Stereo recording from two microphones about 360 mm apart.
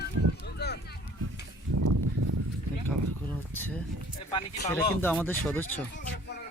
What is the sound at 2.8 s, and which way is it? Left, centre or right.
Speech, centre.